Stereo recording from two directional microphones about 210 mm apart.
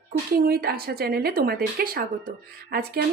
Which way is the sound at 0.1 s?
45° right (ahead or behind).